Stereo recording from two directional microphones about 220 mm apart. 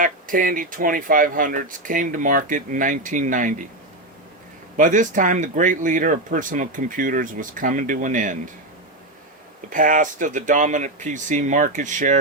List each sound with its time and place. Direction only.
0.0 s speech: 40° right (ahead or behind)
4.8 s speech: 35° right (ahead or behind)
9.6 s speech: 35° right (ahead or behind)